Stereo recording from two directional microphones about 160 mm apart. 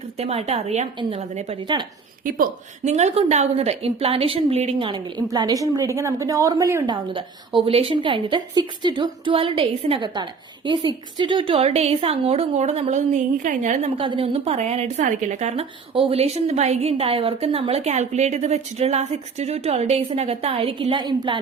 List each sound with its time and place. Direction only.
0.2 s a woman's voice: 40° right (ahead or behind)
1.6 s speech: 30° right (ahead or behind)
2.2 s a woman's voice: 55° right (ahead or behind); by 6.9 s 20° right (ahead or behind)
6.9 s a woman's voice: 30° right (ahead or behind); by 13.9 s 50° right (ahead or behind)
14.0 s a woman's voice: 35° right (ahead or behind)